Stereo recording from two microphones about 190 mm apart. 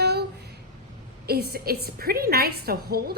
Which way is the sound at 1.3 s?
55° right (ahead or behind).